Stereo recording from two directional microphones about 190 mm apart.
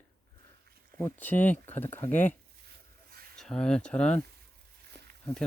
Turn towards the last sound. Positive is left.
turn(degrees=5)  # may be behind; listen again after turning